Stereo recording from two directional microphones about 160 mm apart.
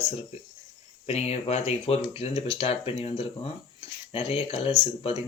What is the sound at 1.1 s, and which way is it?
Speech, 40° left (ahead or behind).